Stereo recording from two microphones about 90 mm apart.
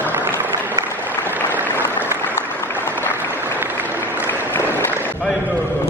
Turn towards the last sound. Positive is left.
turn(degrees=25)  # may be behind; listen again after turning